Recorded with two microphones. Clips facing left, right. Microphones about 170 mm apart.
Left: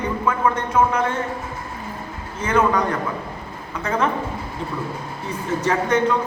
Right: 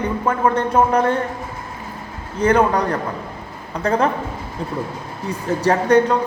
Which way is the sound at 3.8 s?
35° right (ahead or behind).